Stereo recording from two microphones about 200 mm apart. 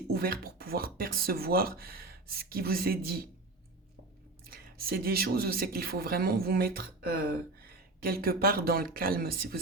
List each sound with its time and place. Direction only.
0.1 s speech: 50° right (ahead or behind)
4.4 s speech: 45° right (ahead or behind)